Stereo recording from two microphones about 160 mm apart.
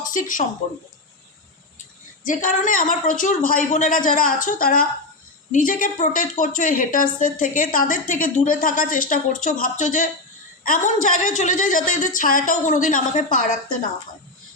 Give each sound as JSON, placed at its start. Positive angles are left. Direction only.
{"t": 0.0, "sound": "speech", "side_deg": 55}
{"t": 2.2, "sound": "a woman's voice", "side_deg": 55}